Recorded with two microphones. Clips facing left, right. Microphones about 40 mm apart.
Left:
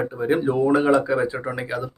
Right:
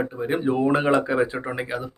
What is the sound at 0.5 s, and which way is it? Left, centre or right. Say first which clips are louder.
Speech: left 1 dB; right.